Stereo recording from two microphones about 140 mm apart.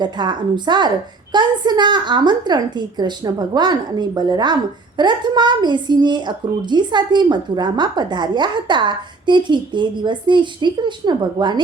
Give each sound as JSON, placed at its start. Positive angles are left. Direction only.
{"t": 0.0, "sound": "a woman's voice", "side_deg": -30}